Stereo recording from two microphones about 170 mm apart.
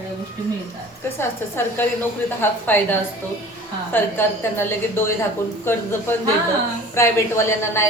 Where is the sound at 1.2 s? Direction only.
15° left (ahead or behind).